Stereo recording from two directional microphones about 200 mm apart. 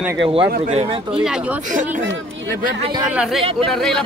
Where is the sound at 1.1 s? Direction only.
5° right (ahead or behind).